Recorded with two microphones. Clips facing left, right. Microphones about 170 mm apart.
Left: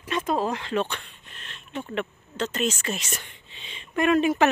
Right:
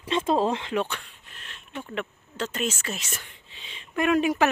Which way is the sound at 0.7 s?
5° right (ahead or behind).